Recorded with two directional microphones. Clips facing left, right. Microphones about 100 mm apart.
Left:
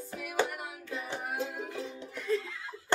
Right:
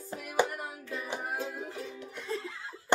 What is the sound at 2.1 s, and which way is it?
Music, 25° right (ahead or behind).